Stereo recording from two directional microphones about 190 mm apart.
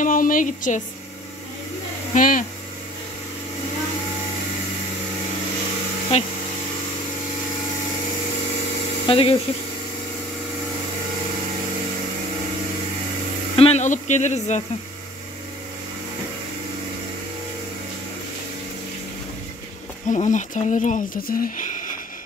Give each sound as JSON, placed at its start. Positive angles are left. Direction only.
{"t": 0.0, "sound": "a sound", "side_deg": 45}
{"t": 2.1, "sound": "speech", "side_deg": 45}
{"t": 6.1, "sound": "speech", "side_deg": 35}
{"t": 9.0, "sound": "speech", "side_deg": 30}
{"t": 13.6, "sound": "a sound", "side_deg": 35}
{"t": 20.1, "sound": "speech", "side_deg": 40}